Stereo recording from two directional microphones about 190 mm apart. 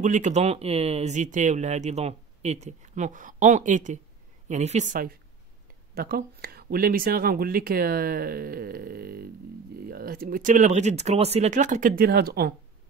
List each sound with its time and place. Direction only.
0.0 s speech: 40° right (ahead or behind)